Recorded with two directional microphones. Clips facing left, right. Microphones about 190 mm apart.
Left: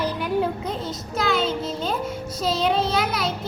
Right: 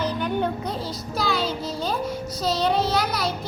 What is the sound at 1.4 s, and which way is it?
Child singing, 25° left (ahead or behind).